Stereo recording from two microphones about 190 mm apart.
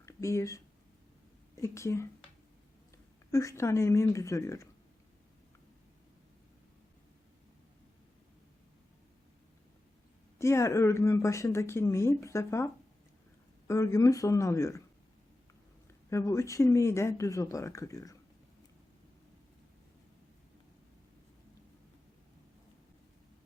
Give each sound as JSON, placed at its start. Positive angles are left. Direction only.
{"t": 0.0, "sound": "speech", "side_deg": 15}
{"t": 3.3, "sound": "speech", "side_deg": 15}
{"t": 10.3, "sound": "speech", "side_deg": 15}
{"t": 16.0, "sound": "speech", "side_deg": 15}